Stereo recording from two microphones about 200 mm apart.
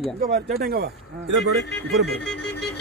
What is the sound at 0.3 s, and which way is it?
Speech, 50° right (ahead or behind).